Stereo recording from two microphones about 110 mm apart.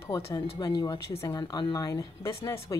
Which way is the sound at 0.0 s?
30° left (ahead or behind).